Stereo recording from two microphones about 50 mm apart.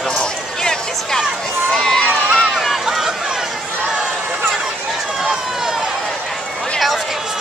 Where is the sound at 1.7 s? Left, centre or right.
Centre.